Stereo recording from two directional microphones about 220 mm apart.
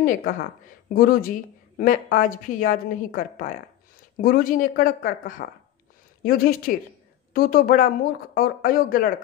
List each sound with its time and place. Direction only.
0.0 s a woman's voice: 40° left (ahead or behind)